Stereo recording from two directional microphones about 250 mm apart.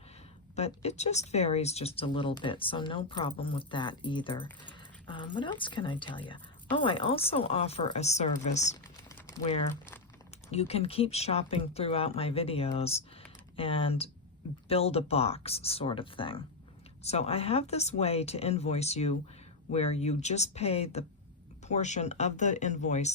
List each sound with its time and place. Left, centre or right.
0.5 s speech: left
9.0 s a sound: centre
10.5 s speech: left